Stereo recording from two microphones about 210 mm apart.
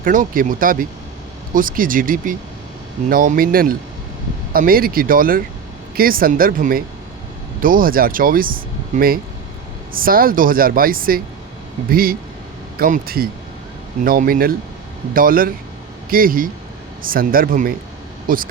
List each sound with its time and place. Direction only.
0.0 s speech: 40° right (ahead or behind)